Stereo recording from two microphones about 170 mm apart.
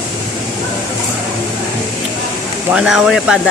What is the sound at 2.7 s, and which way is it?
Speech, 5° right (ahead or behind).